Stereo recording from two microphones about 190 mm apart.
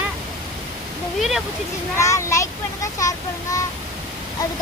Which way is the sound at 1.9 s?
15° left (ahead or behind).